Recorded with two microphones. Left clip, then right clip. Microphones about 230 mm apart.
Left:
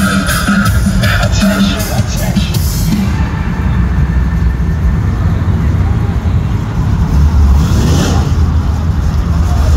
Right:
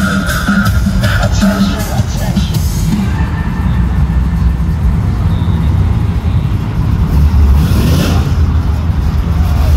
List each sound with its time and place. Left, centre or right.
0.0 s music: left
7.7 s vehicle: right